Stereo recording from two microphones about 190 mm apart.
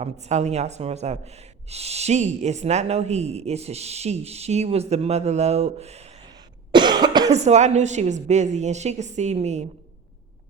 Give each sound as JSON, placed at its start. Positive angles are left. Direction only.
{"t": 0.0, "sound": "speech", "side_deg": -35}
{"t": 6.7, "sound": "cough", "side_deg": -25}
{"t": 7.3, "sound": "speech", "side_deg": -35}